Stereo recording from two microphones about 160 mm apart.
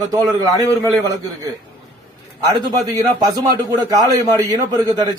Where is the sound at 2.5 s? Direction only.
20° right (ahead or behind).